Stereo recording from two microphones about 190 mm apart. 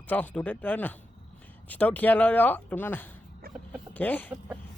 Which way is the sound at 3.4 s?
50° right (ahead or behind).